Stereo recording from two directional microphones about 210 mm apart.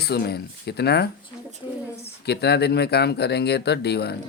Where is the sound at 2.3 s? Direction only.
50° left (ahead or behind).